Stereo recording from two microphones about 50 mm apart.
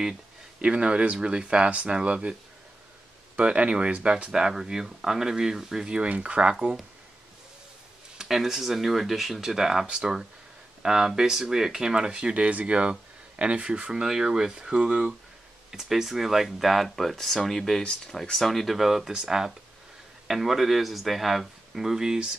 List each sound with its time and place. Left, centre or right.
0.6 s speech: right
3.3 s speech: right
6.0 s speech: right
8.2 s speech: centre